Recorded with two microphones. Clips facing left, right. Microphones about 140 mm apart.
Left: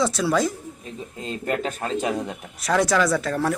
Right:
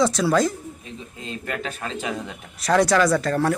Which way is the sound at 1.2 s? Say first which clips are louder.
Left 4 dB; 40° left (ahead or behind).